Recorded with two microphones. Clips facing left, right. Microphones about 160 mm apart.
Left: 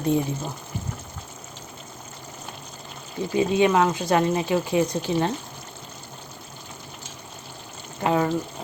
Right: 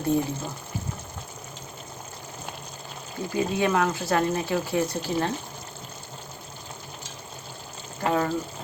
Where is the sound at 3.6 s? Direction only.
20° left (ahead or behind).